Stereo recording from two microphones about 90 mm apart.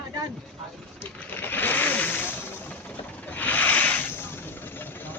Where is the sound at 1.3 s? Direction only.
20° left (ahead or behind).